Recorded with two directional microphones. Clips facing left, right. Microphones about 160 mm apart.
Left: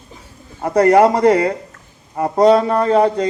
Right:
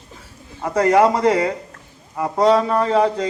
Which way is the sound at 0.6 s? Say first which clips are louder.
Left 4 dB; 40° left (ahead or behind).